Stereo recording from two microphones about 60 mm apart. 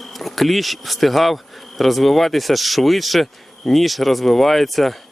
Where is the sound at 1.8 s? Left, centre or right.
Centre.